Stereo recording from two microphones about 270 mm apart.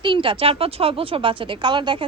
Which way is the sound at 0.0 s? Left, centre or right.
Centre.